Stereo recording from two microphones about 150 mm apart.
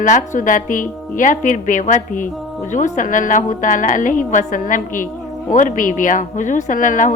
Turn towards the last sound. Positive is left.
turn(degrees=60)  # may be behind; listen again after turning